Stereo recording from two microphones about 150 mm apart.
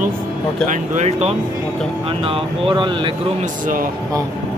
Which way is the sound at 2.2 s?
35° right (ahead or behind).